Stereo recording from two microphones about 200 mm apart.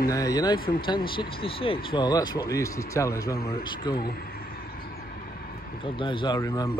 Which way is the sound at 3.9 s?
50° left (ahead or behind).